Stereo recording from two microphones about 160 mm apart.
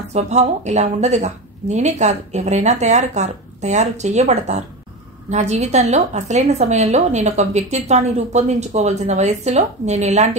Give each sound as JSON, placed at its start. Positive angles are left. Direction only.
{"t": 0.1, "sound": "a woman's voice", "side_deg": -45}